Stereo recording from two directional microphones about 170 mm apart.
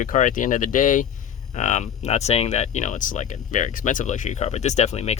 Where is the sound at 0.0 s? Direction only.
50° left (ahead or behind).